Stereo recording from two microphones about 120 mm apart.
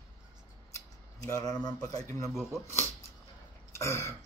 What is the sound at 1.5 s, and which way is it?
Speech, 35° left (ahead or behind).